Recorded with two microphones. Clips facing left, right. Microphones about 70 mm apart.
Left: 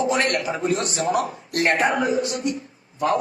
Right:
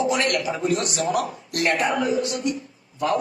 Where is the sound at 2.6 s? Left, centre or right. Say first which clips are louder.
Left 2 dB; left.